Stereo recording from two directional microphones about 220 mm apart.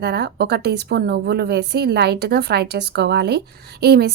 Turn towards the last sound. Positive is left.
turn(degrees=-45)  # may be behind; listen again after turning